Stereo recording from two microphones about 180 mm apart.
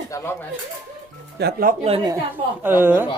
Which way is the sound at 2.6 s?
10° right (ahead or behind).